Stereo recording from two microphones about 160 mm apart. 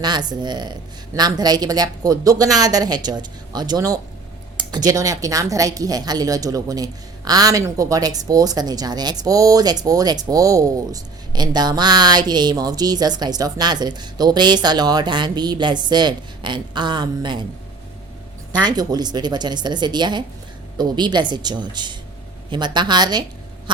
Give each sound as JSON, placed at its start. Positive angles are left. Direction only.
{"t": 0.0, "sound": "speech", "side_deg": -25}
{"t": 18.6, "sound": "speech", "side_deg": -25}